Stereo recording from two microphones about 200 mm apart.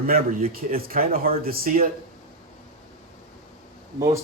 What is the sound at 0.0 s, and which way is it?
Speech, 45° right (ahead or behind).